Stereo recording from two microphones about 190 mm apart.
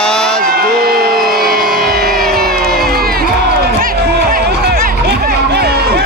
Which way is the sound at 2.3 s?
55° right (ahead or behind).